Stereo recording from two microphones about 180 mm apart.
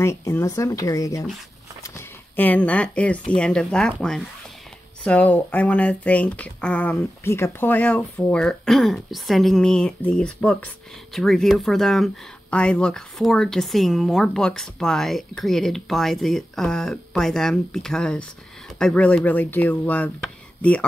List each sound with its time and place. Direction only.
0.0 s speech: 15° left (ahead or behind)